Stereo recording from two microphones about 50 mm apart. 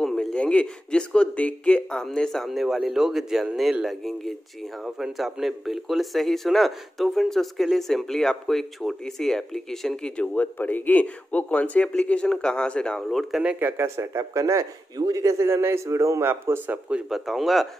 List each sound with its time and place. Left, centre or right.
0.0 s a sound: centre
0.4 s speech: left
2.5 s a man's voice: centre
3.8 s a man's voice: centre
4.8 s a man's voice: centre
10.1 s speech: left
13.1 s a man's voice: centre
13.7 s a man's voice: right
16.3 s speech: right
17.1 s a man's voice: centre